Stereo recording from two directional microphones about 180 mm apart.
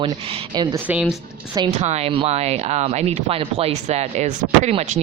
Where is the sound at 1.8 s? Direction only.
35° right (ahead or behind).